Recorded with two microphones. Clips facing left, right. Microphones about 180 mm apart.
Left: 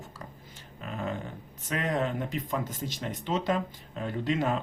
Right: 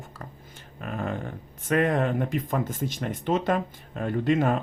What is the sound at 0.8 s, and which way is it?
Speech, 55° right (ahead or behind).